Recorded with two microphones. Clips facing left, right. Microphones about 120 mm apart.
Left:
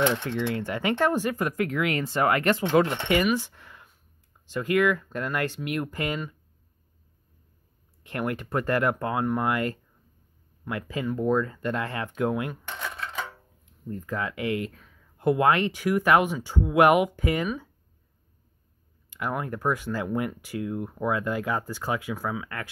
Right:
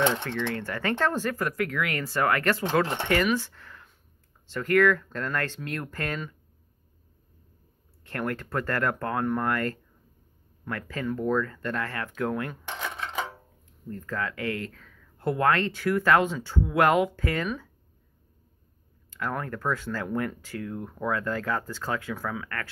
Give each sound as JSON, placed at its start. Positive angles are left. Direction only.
{"t": 0.3, "sound": "speech", "side_deg": 15}
{"t": 8.0, "sound": "speech", "side_deg": 15}
{"t": 12.9, "sound": "a sound", "side_deg": -20}
{"t": 13.8, "sound": "speech", "side_deg": 15}
{"t": 19.0, "sound": "speech", "side_deg": 15}